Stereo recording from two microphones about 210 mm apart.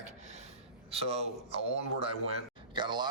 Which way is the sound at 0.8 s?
30° right (ahead or behind).